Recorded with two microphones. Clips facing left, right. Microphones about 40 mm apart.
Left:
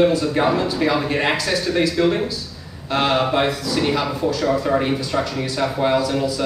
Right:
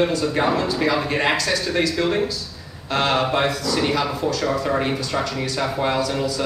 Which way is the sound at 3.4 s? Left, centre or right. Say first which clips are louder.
Left 1 dB; centre.